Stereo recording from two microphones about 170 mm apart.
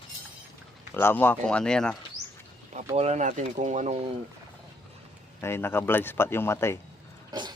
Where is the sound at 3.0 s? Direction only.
40° right (ahead or behind).